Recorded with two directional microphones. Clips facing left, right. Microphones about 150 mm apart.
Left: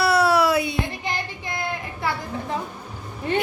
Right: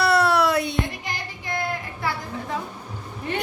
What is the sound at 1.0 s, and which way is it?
Child singing, 25° left (ahead or behind).